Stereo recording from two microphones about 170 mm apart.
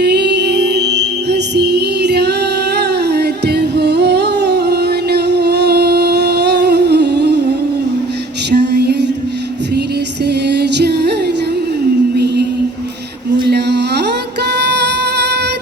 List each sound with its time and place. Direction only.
0.0 s music: 75° right (ahead or behind)
2.7 s singing: 75° right (ahead or behind)
8.4 s music: 75° right (ahead or behind)
10.2 s music: 75° right (ahead or behind)
12.1 s music: 75° right (ahead or behind)
13.5 s a sound: 75° right (ahead or behind)